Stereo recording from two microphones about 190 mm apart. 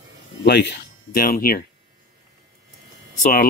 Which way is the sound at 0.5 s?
60° left (ahead or behind).